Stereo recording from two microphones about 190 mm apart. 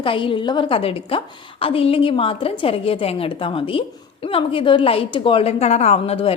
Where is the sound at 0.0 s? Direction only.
25° left (ahead or behind).